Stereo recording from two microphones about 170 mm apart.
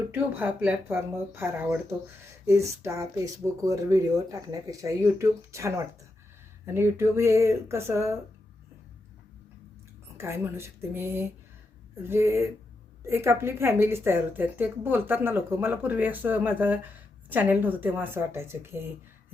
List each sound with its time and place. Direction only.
0.1 s a woman's voice: 10° right (ahead or behind)
10.2 s a woman's voice: 15° right (ahead or behind)